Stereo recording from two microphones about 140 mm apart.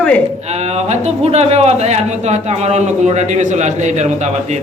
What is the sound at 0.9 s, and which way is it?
Speech, 50° right (ahead or behind).